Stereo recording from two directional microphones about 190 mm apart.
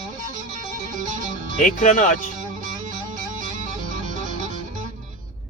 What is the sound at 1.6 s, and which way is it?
Speech, 40° left (ahead or behind).